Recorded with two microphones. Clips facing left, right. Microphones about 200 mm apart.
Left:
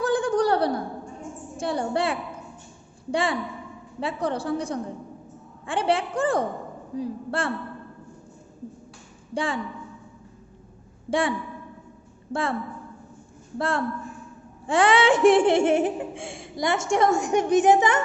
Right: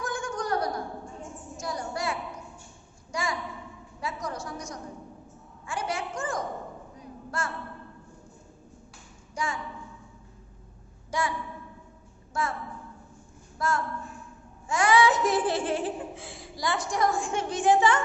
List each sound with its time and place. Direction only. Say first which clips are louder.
0.0 s a sound: left 11 dB; 35° left (ahead or behind)
3.1 s a woman's voice: left 7 dB; 30° left (ahead or behind)
9.3 s a woman's voice: left 6 dB; 30° left (ahead or behind)
11.1 s a woman's voice: left 6 dB; 30° left (ahead or behind)
13.6 s a woman's voice: left 4 dB; 30° left (ahead or behind)